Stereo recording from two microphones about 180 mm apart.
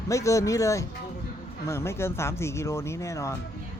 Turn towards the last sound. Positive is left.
turn(degrees=15)  # may be behind; listen again after turning